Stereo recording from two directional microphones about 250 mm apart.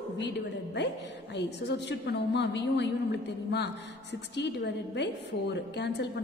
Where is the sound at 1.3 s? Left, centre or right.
Left.